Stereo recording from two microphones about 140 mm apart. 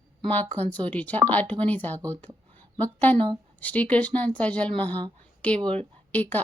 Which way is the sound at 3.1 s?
35° right (ahead or behind).